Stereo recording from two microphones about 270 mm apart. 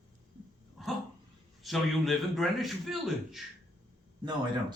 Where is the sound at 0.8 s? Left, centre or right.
Centre.